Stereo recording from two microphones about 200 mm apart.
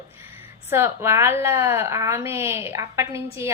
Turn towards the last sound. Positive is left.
turn(degrees=-15)  # may be behind; listen again after turning